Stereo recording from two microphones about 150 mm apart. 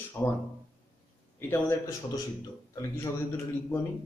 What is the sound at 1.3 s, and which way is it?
A man's voice, 15° left (ahead or behind).